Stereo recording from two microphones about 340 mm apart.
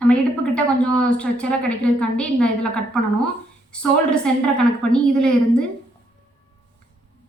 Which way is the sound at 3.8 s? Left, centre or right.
Centre.